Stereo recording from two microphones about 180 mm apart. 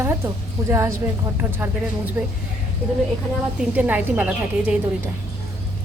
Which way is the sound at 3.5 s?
10° right (ahead or behind).